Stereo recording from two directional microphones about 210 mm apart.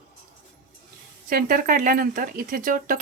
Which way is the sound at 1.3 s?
45° right (ahead or behind).